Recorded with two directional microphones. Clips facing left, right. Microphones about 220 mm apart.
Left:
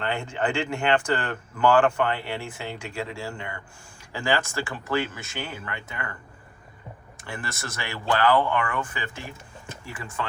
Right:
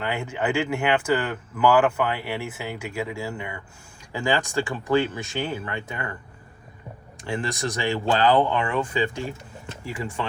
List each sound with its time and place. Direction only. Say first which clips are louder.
0.0 s speech: right 1 dB; 10° right (ahead or behind)
7.3 s speech: right 8 dB; 15° right (ahead or behind)